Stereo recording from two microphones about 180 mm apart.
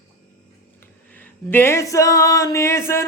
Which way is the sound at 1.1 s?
10° left (ahead or behind).